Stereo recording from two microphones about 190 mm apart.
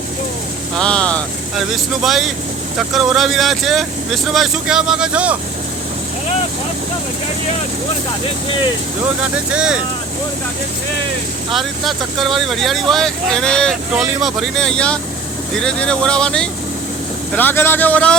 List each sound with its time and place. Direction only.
0.8 s speech: 5° left (ahead or behind)
9.5 s speech: 5° right (ahead or behind)
11.5 s speech: centre (ahead or behind)